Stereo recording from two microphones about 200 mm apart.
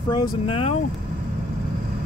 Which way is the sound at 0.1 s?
25° left (ahead or behind).